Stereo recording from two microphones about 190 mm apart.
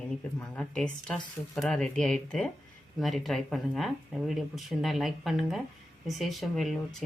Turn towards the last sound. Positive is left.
turn(degrees=0)  # may be behind; listen again after turning